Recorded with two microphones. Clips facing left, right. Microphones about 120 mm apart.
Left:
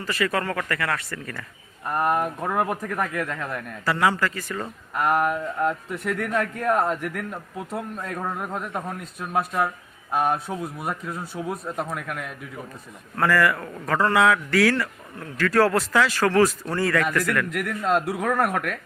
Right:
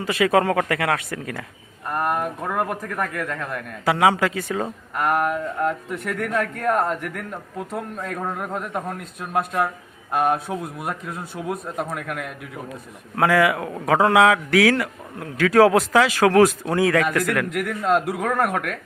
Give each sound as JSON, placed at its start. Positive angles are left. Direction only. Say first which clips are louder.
{"t": 0.1, "sound": "speech", "louder": "right 7 dB", "side_deg": -80}
{"t": 0.7, "sound": "a man's voice", "louder": "right 4 dB", "side_deg": -70}
{"t": 1.9, "sound": "a man's voice", "louder": "left 1 dB", "side_deg": 0}
{"t": 3.8, "sound": "speech", "louder": "right 4 dB", "side_deg": -70}
{"t": 4.9, "sound": "a man's voice", "louder": "right 1 dB", "side_deg": 0}
{"t": 13.1, "sound": "a man's voice", "louder": "right 3 dB", "side_deg": -60}
{"t": 17.6, "sound": "a man's voice", "louder": "right 3 dB", "side_deg": 0}